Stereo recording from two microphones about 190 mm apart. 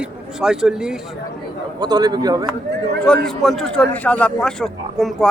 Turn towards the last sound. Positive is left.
turn(degrees=0)  # may be behind; listen again after turning